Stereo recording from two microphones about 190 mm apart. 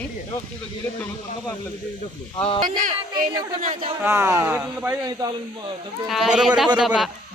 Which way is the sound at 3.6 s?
35° right (ahead or behind).